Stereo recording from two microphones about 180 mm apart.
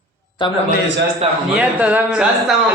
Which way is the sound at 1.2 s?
35° right (ahead or behind).